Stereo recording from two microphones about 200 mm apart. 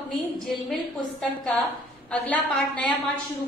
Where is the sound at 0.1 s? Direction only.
Centre (ahead or behind).